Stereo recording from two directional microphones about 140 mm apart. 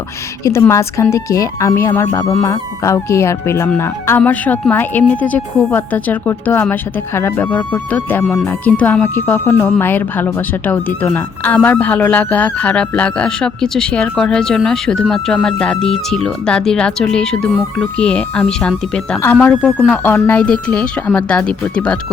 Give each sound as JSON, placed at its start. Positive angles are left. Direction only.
{"t": 0.4, "sound": "speech", "side_deg": 20}